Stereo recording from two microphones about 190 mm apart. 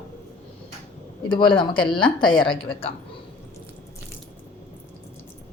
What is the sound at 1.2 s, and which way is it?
Speech, 25° left (ahead or behind).